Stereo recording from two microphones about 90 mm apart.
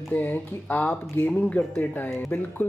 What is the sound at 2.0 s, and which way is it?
Speech, 30° left (ahead or behind).